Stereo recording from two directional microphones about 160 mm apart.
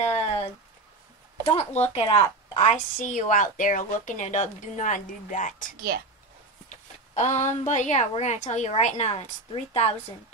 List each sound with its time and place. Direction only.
0.0 s a sound: 40° left (ahead or behind)
1.4 s speech: 40° left (ahead or behind)
2.6 s a woman's voice: 50° left (ahead or behind)
7.2 s a woman's voice: 45° left (ahead or behind)